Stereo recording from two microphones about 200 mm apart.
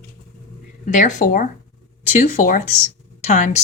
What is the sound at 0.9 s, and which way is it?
A woman's voice, 40° left (ahead or behind).